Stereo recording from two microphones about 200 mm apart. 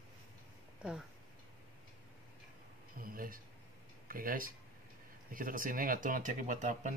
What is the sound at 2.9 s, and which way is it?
Speech, 45° right (ahead or behind).